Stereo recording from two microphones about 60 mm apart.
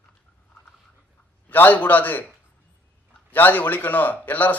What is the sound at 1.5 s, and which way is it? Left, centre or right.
Speech, left.